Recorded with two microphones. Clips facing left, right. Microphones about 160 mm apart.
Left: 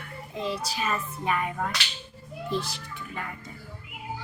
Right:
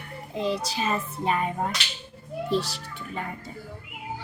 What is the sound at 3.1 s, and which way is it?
Child singing, 30° right (ahead or behind).